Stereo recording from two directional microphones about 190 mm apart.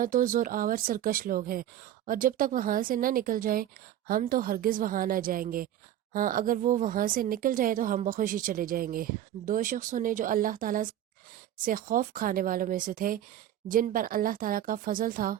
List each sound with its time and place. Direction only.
0.0 s a woman's voice: 45° right (ahead or behind)